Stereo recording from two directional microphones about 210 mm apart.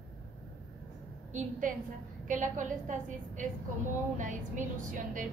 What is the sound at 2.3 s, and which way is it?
A woman's voice, 35° right (ahead or behind).